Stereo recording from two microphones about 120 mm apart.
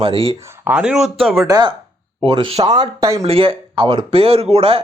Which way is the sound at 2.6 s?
35° right (ahead or behind).